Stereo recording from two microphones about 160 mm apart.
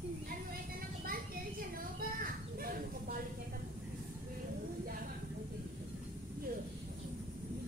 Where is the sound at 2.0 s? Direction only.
65° right (ahead or behind).